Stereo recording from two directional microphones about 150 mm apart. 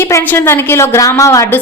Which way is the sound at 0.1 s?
15° left (ahead or behind).